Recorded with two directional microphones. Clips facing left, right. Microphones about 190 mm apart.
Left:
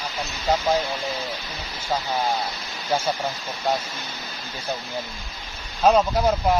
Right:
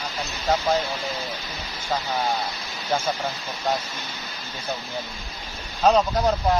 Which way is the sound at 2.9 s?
10° left (ahead or behind).